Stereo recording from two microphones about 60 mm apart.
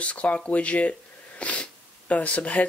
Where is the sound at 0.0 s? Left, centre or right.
Left.